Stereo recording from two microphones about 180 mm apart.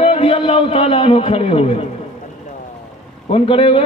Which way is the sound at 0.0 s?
30° left (ahead or behind).